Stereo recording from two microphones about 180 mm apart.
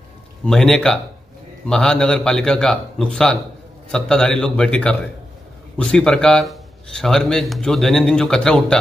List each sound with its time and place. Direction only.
0.5 s speech: 5° left (ahead or behind)